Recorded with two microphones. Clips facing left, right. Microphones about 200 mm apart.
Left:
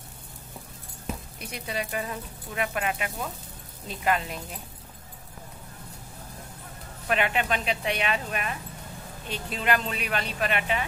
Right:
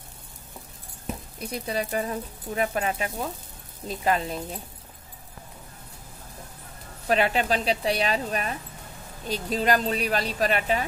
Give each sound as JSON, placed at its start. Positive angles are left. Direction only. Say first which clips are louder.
{"t": 1.4, "sound": "speech", "louder": "right 6 dB", "side_deg": -35}
{"t": 7.1, "sound": "speech", "louder": "right 3 dB", "side_deg": -35}